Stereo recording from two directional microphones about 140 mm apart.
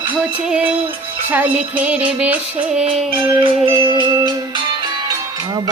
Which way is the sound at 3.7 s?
35° right (ahead or behind).